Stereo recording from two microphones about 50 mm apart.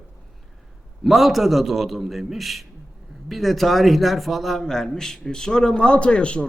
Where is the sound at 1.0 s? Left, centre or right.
Centre; by 6.5 s left.